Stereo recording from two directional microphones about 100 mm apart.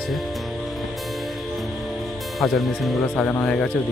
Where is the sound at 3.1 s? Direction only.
15° left (ahead or behind).